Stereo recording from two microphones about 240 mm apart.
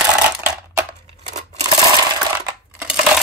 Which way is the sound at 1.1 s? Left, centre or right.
Right.